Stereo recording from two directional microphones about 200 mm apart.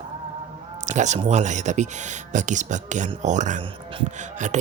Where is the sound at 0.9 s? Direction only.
35° right (ahead or behind).